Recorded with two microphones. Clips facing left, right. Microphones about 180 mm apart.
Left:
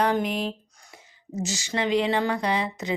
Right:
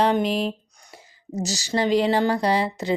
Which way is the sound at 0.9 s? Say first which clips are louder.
Right 3 dB; 35° right (ahead or behind).